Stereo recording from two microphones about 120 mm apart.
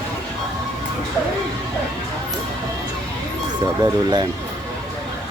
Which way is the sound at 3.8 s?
35° right (ahead or behind).